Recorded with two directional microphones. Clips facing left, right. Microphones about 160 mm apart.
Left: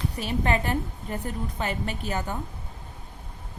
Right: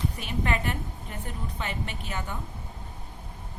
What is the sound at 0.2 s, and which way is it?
A woman's voice, 35° left (ahead or behind).